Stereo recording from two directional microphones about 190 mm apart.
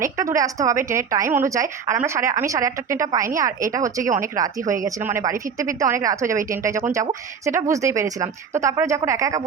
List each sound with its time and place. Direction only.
0.0 s a woman's voice: 15° right (ahead or behind)
4.0 s speech: 45° right (ahead or behind)
4.4 s a woman's voice: 20° right (ahead or behind)